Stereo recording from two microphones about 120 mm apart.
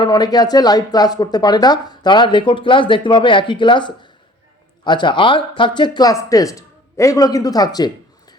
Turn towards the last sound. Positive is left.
turn(degrees=35)  # may be behind; listen again after turning